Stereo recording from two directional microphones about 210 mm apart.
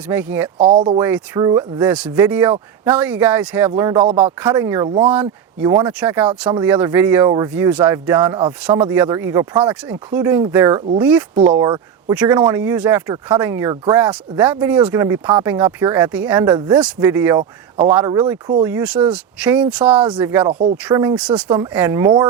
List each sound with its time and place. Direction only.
0.1 s speech: 10° right (ahead or behind)
0.6 s speech: 30° right (ahead or behind)
0.9 s speech: 10° right (ahead or behind)
14.1 s speech: 10° right (ahead or behind)
19.8 s speech: 25° right (ahead or behind)
20.1 s speech: 10° right (ahead or behind)
20.5 s speech: 35° right (ahead or behind)
20.9 s speech: 15° right (ahead or behind)